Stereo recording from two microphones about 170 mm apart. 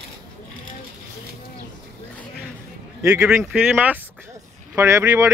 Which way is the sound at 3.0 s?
5° right (ahead or behind).